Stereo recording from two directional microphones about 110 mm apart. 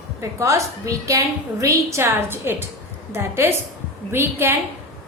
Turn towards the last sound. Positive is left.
turn(degrees=-20)  # may be behind; listen again after turning